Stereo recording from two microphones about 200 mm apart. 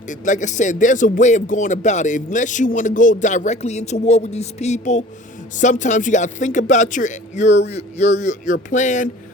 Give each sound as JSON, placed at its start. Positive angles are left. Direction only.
{"t": 0.1, "sound": "speech", "side_deg": 40}